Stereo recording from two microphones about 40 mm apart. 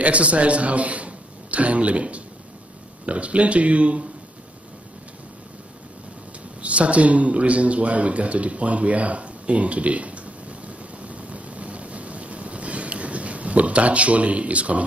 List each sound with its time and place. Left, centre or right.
0.0 s a man's voice: right
6.6 s speech: right
11.0 s vehicle: right